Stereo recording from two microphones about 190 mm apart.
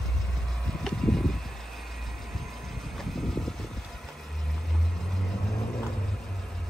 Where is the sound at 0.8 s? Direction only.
Centre (ahead or behind).